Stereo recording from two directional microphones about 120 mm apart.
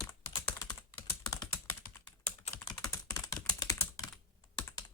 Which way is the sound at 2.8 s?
25° left (ahead or behind).